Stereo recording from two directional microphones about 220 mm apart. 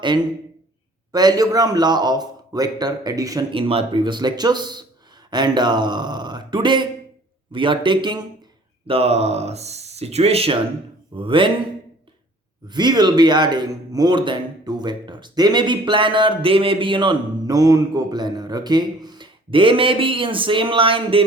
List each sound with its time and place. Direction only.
1.1 s speech: 20° right (ahead or behind)
12.6 s speech: 20° right (ahead or behind)